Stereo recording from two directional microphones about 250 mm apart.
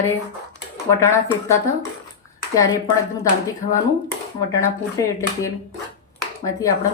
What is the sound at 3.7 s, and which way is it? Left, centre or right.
A woman's voice, centre.